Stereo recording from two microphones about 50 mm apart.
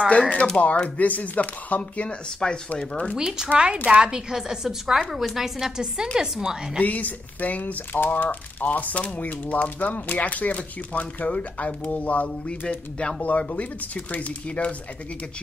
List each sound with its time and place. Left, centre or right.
0.1 s speech: left
3.2 s a woman's voice: centre
3.7 s a woman's voice: right
6.8 s speech: left
12.4 s speech: centre
13.2 s speech: left